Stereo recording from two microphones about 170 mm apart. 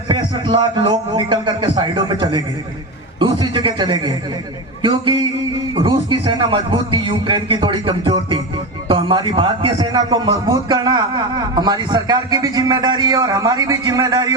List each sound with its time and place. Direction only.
0.1 s a man's voice: 25° right (ahead or behind)